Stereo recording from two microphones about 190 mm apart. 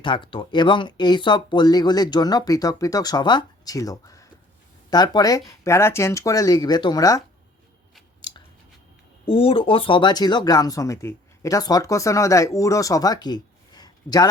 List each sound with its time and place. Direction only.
0.0 s speech: 25° left (ahead or behind)
8.3 s chewing: 25° left (ahead or behind)
9.2 s speech: 30° left (ahead or behind)